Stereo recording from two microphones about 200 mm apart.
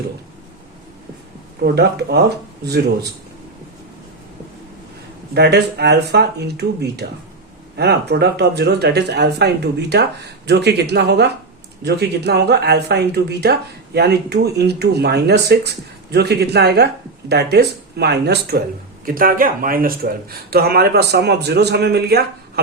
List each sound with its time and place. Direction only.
1.6 s speech: 55° right (ahead or behind)
5.3 s speech: 55° right (ahead or behind)